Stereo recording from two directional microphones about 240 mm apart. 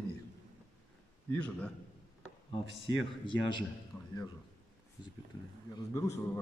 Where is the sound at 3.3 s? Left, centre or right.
Centre.